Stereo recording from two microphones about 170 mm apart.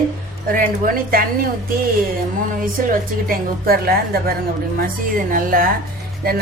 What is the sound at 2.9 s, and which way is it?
A woman's voice, 60° right (ahead or behind).